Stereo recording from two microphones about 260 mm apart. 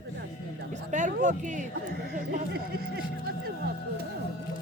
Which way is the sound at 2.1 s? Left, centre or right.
Right.